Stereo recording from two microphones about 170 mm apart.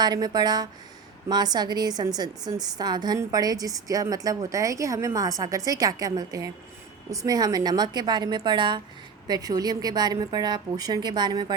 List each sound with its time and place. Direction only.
0.0 s a woman's voice: 25° right (ahead or behind)